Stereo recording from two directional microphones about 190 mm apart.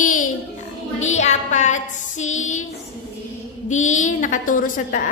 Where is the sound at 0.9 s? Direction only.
40° left (ahead or behind).